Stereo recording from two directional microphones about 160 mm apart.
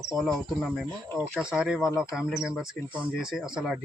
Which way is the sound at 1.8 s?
20° left (ahead or behind).